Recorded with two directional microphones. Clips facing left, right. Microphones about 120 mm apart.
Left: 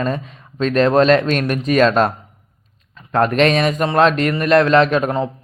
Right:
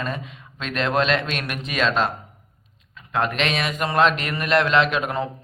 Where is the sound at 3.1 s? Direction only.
45° left (ahead or behind).